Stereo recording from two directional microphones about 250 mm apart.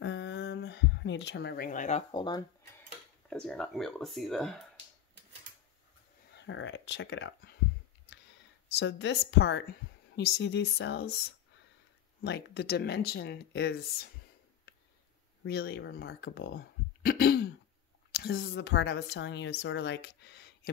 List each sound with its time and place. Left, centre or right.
0.0 s a sound: left; by 2.4 s centre
3.3 s speech: centre
6.3 s speech: left
8.7 s a woman's voice: left
12.2 s a woman's voice: left
15.4 s a woman's voice: left